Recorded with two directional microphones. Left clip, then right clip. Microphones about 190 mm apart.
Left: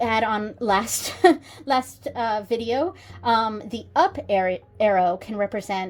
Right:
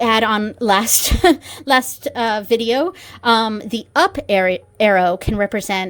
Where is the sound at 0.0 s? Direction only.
40° right (ahead or behind).